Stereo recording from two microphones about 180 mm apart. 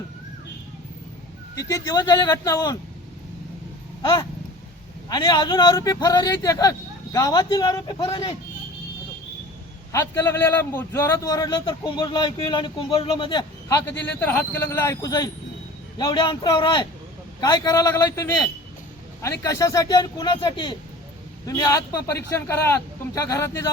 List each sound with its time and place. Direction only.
1.5 s a man's voice: 20° left (ahead or behind)
4.0 s a man's voice: 25° left (ahead or behind)
9.9 s a man's voice: 15° left (ahead or behind)